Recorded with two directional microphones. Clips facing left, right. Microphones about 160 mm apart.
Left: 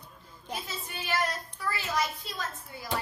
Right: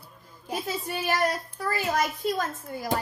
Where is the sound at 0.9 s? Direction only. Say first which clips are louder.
Right 5 dB; 50° right (ahead or behind).